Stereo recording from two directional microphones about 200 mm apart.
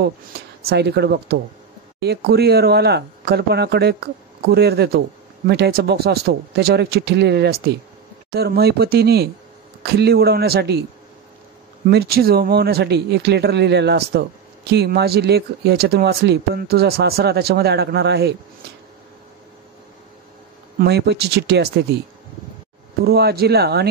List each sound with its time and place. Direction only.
0.7 s speech: 55° right (ahead or behind)
11.9 s speech: 50° right (ahead or behind)
20.8 s speech: 55° right (ahead or behind)
23.0 s speech: 50° right (ahead or behind)